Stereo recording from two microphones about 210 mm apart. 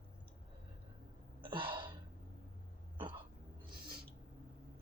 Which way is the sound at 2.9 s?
25° right (ahead or behind).